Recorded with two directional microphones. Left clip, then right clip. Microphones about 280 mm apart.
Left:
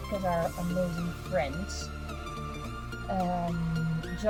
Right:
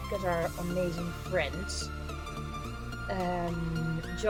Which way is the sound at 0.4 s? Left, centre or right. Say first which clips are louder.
Left 1 dB; centre.